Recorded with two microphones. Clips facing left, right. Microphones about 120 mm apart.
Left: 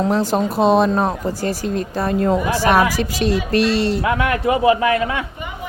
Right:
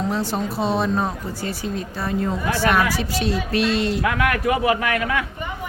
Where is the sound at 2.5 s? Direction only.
40° left (ahead or behind).